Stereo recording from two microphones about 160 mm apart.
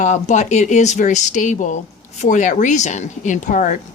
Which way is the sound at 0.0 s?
50° left (ahead or behind).